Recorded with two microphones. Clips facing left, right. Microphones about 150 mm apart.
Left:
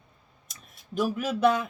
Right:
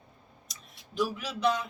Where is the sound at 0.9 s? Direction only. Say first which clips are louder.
Left 4 dB; 50° left (ahead or behind).